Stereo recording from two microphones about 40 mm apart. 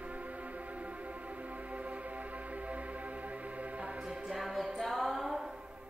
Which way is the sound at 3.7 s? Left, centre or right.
Right.